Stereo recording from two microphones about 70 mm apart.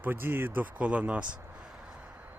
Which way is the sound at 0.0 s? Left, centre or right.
Right.